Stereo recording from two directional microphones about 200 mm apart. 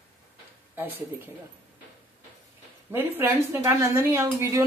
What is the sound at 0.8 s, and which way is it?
Speech, 10° right (ahead or behind).